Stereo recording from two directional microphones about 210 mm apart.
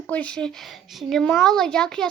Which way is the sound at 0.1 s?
5° left (ahead or behind).